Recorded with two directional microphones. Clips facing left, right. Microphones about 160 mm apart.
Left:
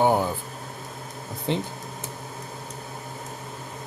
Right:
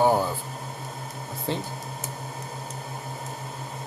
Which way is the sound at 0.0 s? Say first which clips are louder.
Even; 20° left (ahead or behind).